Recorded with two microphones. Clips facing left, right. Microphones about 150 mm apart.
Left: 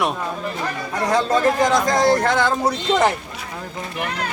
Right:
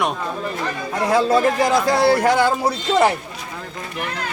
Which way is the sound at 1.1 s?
10° right (ahead or behind).